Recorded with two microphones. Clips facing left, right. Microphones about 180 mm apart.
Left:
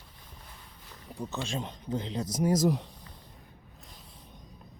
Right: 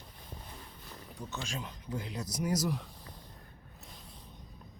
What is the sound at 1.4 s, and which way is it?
Speech, 30° left (ahead or behind).